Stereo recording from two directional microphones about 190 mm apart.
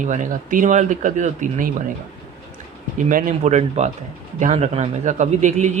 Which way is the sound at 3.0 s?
45° right (ahead or behind).